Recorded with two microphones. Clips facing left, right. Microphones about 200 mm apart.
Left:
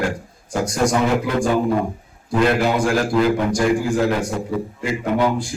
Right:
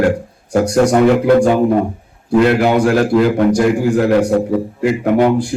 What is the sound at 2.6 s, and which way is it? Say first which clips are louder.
A man's voice: right 6 dB; 65° right (ahead or behind).